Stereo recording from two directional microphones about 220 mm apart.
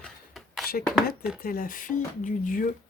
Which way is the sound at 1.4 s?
40° left (ahead or behind).